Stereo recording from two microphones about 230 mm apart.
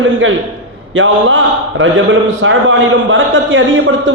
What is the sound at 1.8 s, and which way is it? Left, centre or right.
A man's voice, right.